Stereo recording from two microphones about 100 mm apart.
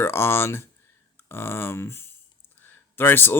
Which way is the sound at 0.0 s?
25° left (ahead or behind).